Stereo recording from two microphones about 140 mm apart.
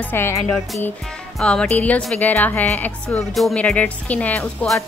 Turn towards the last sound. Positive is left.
turn(degrees=5)  # may be behind; listen again after turning